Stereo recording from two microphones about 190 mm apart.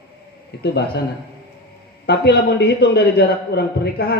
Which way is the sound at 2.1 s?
60° left (ahead or behind).